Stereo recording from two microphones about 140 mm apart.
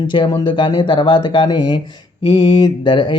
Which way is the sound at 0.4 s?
35° left (ahead or behind).